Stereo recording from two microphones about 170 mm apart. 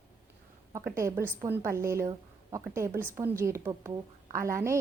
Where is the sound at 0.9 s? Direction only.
15° right (ahead or behind).